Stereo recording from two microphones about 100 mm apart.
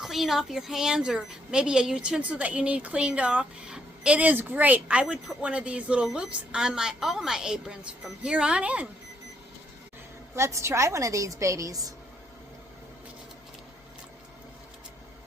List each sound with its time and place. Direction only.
0.0 s a woman's voice: 5° right (ahead or behind)
10.3 s a woman's voice: 30° right (ahead or behind)